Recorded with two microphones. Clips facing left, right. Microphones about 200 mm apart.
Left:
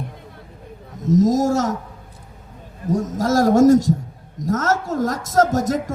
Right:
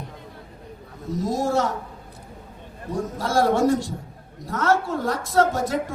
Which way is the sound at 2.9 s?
45° left (ahead or behind).